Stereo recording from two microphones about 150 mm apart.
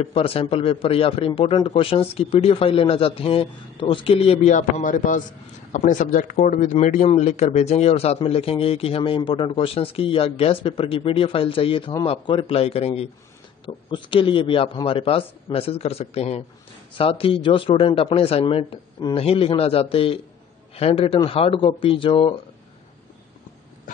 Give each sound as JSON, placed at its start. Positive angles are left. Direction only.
{"t": 0.0, "sound": "a man's voice", "side_deg": 40}